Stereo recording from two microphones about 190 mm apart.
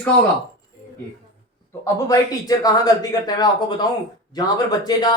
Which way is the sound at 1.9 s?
20° left (ahead or behind).